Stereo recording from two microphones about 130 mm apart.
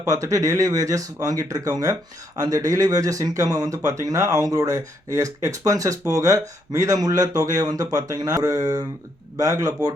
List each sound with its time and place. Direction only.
0.1 s speech: 25° right (ahead or behind)